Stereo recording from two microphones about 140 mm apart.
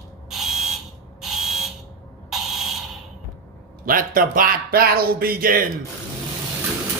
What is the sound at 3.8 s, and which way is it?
Speech, 90° right.